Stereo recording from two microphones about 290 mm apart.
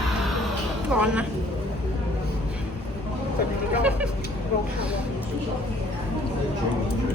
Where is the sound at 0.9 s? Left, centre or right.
Centre.